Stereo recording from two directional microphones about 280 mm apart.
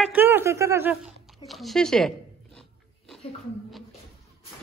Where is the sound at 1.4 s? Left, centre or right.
Centre.